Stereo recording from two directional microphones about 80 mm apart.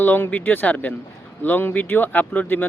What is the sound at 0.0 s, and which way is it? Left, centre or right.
Speech, left.